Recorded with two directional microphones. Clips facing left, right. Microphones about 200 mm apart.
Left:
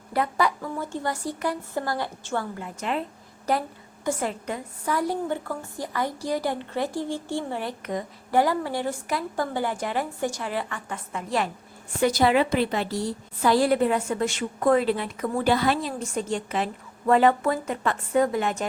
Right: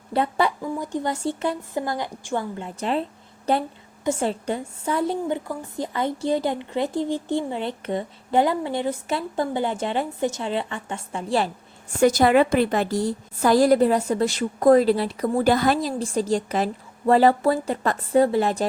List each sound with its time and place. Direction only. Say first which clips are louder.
0.1 s a woman's voice: right 2 dB; 25° right (ahead or behind)
0.6 s a woman's voice: right 3 dB; 15° right (ahead or behind)
4.0 s a woman's voice: right 4 dB; 25° right (ahead or behind)
11.9 s a woman's voice: right 4 dB; 45° right (ahead or behind)